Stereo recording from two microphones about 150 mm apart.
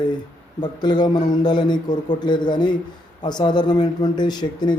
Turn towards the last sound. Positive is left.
turn(degrees=30)  # may be behind; listen again after turning